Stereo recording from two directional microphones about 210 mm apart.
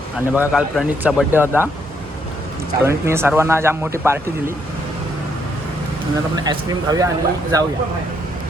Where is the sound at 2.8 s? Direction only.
10° right (ahead or behind).